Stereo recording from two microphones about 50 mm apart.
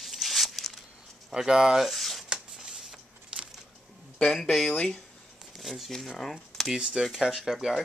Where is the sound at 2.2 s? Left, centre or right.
Centre.